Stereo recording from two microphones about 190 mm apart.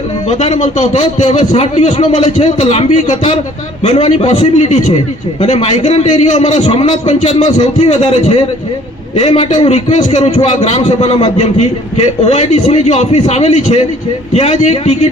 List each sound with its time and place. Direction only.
0.3 s a man's voice: 35° left (ahead or behind)
2.0 s a man's voice: 25° left (ahead or behind)
2.4 s a man's voice: 35° left (ahead or behind)
3.8 s a man's voice: 25° left (ahead or behind)
4.3 s a man's voice: 40° left (ahead or behind)
5.4 s a man's voice: 25° left (ahead or behind)
5.8 s a man's voice: 35° left (ahead or behind)
6.7 s a man's voice: 25° left (ahead or behind)
7.1 s a man's voice: 40° left (ahead or behind)